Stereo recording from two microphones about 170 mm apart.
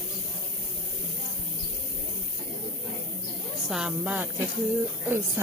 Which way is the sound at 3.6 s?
5° right (ahead or behind).